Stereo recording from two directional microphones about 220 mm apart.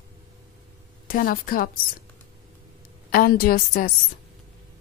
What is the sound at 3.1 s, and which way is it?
Speech, 45° left (ahead or behind).